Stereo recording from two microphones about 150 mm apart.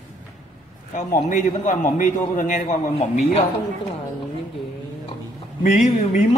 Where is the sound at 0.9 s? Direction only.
55° left (ahead or behind).